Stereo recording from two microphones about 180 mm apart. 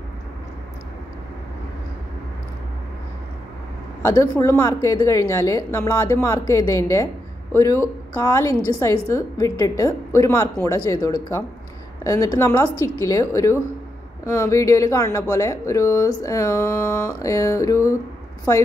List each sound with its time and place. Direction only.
4.2 s speech: 15° left (ahead or behind)